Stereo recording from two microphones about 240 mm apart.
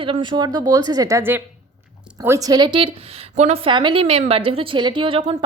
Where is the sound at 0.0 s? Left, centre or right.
Centre.